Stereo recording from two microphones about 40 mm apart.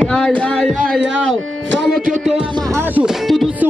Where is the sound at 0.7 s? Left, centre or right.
Centre.